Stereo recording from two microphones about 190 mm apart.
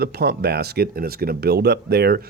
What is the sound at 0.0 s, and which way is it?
Speech, 55° right (ahead or behind).